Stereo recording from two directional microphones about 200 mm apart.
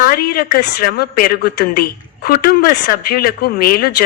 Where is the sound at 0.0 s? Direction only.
50° left (ahead or behind).